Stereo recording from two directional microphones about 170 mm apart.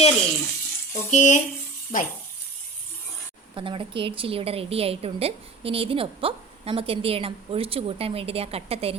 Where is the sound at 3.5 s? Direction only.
30° right (ahead or behind).